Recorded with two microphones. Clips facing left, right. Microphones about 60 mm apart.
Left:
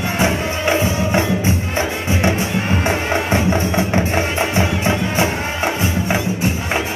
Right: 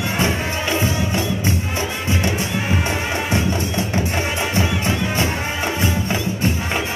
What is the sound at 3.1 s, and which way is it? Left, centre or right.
Music, left.